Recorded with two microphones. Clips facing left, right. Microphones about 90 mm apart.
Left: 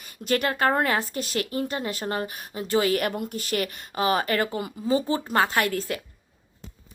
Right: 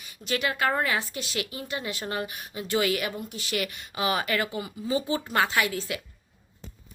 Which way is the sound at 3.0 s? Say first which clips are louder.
Left 5 dB; 55° left (ahead or behind).